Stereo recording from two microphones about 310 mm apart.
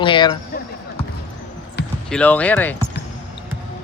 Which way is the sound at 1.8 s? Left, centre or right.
Left.